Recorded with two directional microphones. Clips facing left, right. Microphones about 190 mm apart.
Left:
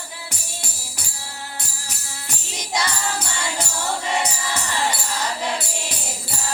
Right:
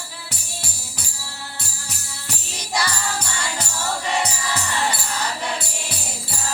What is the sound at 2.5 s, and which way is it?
Jingle bell, 20° left (ahead or behind).